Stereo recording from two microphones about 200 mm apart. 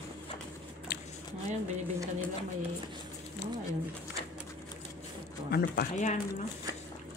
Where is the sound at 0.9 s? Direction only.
55° left (ahead or behind).